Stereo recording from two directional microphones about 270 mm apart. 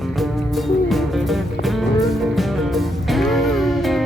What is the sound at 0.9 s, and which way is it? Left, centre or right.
Music, centre.